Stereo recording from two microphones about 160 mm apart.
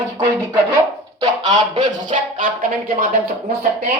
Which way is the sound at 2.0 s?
55° right (ahead or behind).